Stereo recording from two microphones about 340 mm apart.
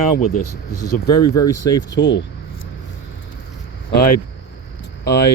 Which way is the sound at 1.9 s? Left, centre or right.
Left.